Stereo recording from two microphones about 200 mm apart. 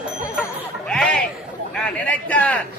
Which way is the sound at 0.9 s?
5° left (ahead or behind).